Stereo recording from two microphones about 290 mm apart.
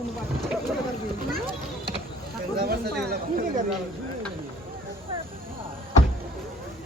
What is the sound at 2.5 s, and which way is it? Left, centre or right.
Speech, right.